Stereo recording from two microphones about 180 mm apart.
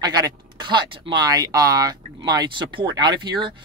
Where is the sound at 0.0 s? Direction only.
20° right (ahead or behind).